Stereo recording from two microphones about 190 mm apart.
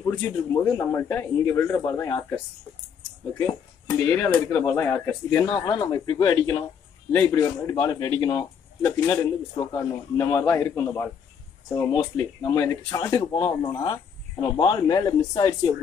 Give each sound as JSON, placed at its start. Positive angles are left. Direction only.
{"t": 0.0, "sound": "speech", "side_deg": 15}
{"t": 3.4, "sound": "speech", "side_deg": 15}
{"t": 5.5, "sound": "speech", "side_deg": 25}
{"t": 12.4, "sound": "speech", "side_deg": 15}